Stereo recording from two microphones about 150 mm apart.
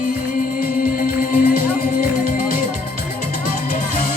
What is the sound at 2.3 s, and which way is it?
Music, 75° left (ahead or behind).